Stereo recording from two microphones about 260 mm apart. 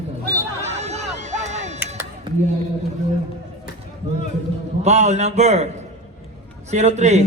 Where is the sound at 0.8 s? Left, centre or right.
Right.